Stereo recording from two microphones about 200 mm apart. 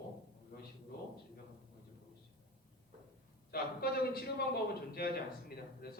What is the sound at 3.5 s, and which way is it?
A man's voice, 50° left (ahead or behind).